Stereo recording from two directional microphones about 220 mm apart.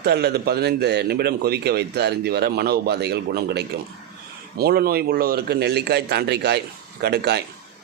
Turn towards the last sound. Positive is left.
turn(degrees=-50)  # may be behind; listen again after turning